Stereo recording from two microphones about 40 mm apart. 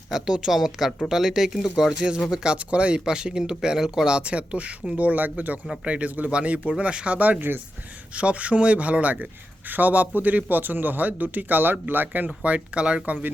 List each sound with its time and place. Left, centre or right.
0.1 s speech: centre
4.2 s speech: right
4.9 s speech: right
5.8 s speech: right
7.2 s speech: right
8.1 s speech: right
12.4 s speech: right